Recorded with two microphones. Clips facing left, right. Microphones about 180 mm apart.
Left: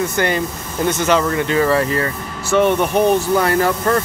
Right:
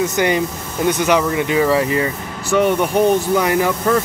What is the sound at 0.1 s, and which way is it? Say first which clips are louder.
Speech: right 2 dB; 15° right (ahead or behind).